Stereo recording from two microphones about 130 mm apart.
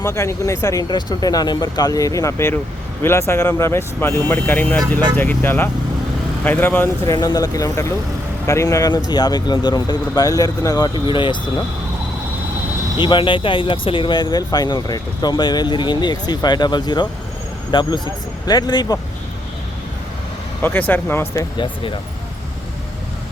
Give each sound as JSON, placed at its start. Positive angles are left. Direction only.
{"t": 0.0, "sound": "speech", "side_deg": 20}
{"t": 13.0, "sound": "speech", "side_deg": 40}
{"t": 20.6, "sound": "speech", "side_deg": 15}